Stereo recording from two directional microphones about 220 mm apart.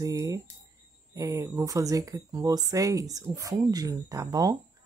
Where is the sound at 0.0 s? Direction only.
15° right (ahead or behind).